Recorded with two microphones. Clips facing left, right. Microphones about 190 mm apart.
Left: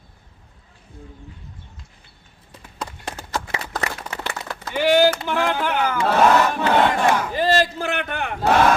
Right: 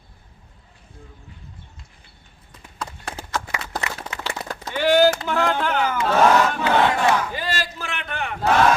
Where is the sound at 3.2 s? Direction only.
35° left (ahead or behind).